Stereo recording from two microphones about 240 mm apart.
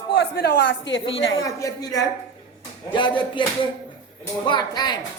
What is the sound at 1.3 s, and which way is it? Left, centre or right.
Speech, centre.